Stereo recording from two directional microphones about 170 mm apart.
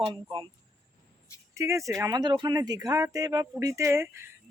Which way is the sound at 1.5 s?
15° right (ahead or behind).